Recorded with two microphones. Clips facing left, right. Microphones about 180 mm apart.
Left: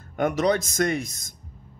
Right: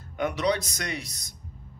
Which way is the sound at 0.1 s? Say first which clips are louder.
Left 4 dB; 45° left (ahead or behind).